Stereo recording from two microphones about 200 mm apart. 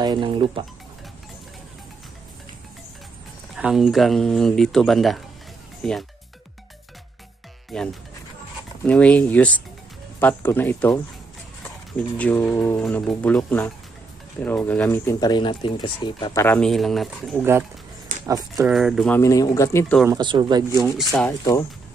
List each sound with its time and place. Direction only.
0.0 s speech: 25° right (ahead or behind)
3.5 s speech: centre (ahead or behind)
7.7 s speech: 5° left (ahead or behind)
12.2 s speech: 5° left (ahead or behind); by 16.4 s 25° left (ahead or behind)
16.4 s speech: 5° left (ahead or behind)
18.2 s speech: 15° right (ahead or behind)
18.7 s speech: centre (ahead or behind)
20.1 s speech: 20° right (ahead or behind)
20.8 s speech: centre (ahead or behind)